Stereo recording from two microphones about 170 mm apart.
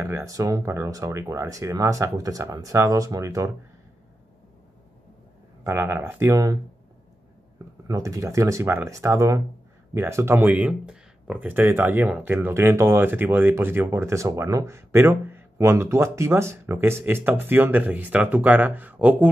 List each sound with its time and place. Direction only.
0.0 s speech: 15° right (ahead or behind)
5.6 s speech: 15° right (ahead or behind)
7.9 s speech: 20° right (ahead or behind)